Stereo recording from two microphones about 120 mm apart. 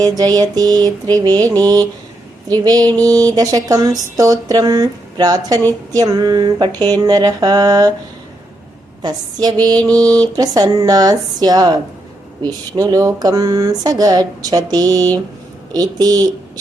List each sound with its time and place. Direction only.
0.0 s speech: 30° right (ahead or behind)
9.0 s speech: 35° right (ahead or behind)